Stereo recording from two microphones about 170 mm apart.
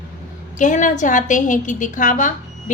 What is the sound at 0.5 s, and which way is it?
A woman's voice, 50° left (ahead or behind).